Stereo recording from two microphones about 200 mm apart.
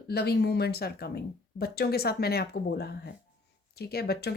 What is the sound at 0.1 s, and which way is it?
Speech, 55° left (ahead or behind).